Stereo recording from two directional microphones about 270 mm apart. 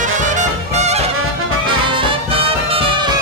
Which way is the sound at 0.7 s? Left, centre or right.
Right.